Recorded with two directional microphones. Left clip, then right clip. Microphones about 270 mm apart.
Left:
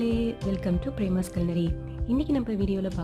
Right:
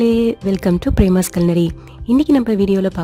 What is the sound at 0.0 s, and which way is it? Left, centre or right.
Speech, right.